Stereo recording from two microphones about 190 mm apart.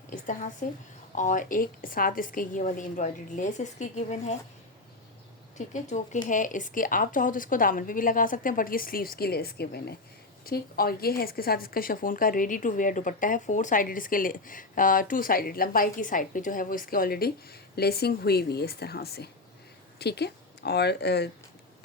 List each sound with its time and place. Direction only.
0.6 s speech: 40° left (ahead or behind)
5.5 s speech: 40° left (ahead or behind); by 21.2 s 60° left (ahead or behind)